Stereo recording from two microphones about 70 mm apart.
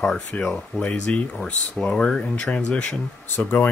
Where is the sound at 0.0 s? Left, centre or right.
Centre.